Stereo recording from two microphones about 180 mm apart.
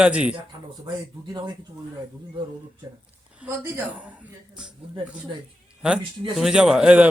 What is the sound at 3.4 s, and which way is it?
A man's voice, 5° right (ahead or behind).